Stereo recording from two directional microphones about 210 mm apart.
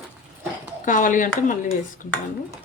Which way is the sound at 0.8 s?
40° left (ahead or behind).